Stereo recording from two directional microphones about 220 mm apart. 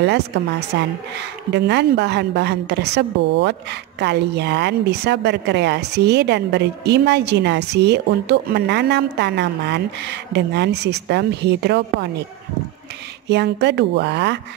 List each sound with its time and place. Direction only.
0.0 s a woman's voice: 50° right (ahead or behind)
13.3 s a woman's voice: 50° right (ahead or behind)